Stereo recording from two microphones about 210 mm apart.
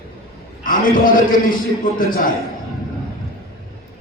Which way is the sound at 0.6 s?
40° left (ahead or behind).